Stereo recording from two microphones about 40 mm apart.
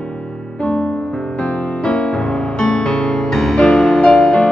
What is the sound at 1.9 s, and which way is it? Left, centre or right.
Music, centre.